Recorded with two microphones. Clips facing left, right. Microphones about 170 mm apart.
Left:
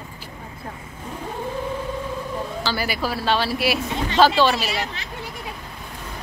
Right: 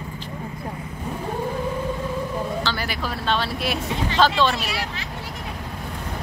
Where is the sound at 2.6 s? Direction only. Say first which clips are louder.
Left 2 dB; 5° left (ahead or behind).